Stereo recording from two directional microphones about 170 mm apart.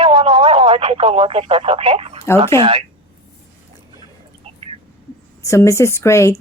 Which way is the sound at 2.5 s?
35° right (ahead or behind).